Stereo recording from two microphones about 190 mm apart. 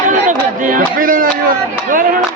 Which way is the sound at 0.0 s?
45° right (ahead or behind).